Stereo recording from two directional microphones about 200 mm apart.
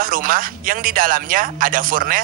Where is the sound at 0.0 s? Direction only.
45° right (ahead or behind).